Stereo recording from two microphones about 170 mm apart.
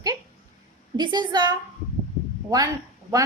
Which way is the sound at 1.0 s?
25° right (ahead or behind).